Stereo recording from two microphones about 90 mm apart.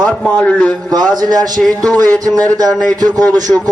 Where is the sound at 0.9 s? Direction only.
50° right (ahead or behind).